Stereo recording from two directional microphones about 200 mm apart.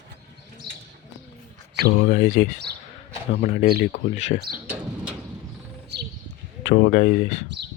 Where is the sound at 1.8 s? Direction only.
50° left (ahead or behind); by 4.4 s 35° left (ahead or behind).